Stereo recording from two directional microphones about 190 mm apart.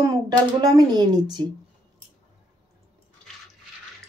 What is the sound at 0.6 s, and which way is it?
Speech, 20° right (ahead or behind).